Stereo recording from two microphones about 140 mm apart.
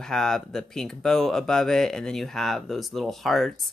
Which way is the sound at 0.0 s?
5° left (ahead or behind).